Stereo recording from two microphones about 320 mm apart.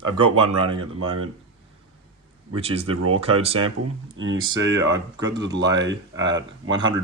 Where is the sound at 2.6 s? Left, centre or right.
Centre.